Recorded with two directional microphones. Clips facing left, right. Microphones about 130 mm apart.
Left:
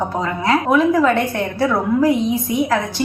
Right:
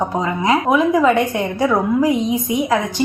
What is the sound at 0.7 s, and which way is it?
A woman's voice, 5° right (ahead or behind).